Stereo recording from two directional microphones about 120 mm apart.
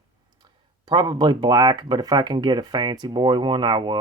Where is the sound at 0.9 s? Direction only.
35° right (ahead or behind).